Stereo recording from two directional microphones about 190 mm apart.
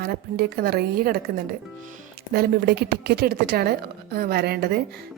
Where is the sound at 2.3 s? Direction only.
55° right (ahead or behind).